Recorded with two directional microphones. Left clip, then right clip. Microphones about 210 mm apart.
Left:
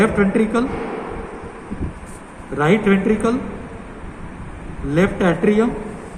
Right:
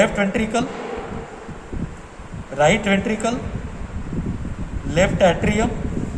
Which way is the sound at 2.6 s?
45° right (ahead or behind).